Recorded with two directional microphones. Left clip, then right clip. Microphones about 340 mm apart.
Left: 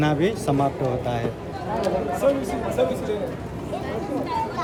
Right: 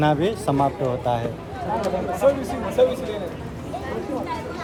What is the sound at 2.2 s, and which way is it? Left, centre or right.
Speech, right.